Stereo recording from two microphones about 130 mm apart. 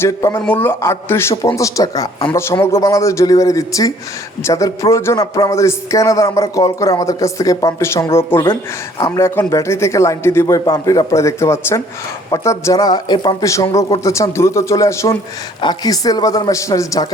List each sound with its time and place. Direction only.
0.0 s a man's voice: 25° left (ahead or behind)
0.4 s a man's voice: 15° left (ahead or behind)
9.0 s speech: 30° left (ahead or behind)
9.2 s a man's voice: 20° left (ahead or behind)